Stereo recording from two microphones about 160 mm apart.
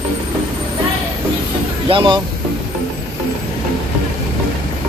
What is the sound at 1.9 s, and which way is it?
Speech, 30° right (ahead or behind).